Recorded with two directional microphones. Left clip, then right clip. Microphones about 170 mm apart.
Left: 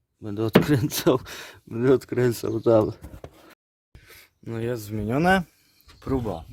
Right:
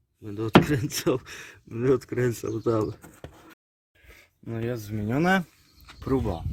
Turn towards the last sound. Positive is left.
turn(degrees=0)  # may be behind; listen again after turning